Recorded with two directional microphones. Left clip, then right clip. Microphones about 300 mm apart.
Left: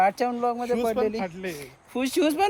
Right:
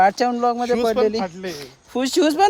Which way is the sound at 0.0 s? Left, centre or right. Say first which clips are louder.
Right 6 dB; centre.